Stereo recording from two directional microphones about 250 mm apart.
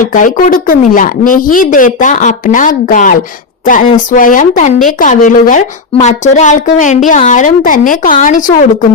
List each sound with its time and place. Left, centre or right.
0.0 s a woman's voice: left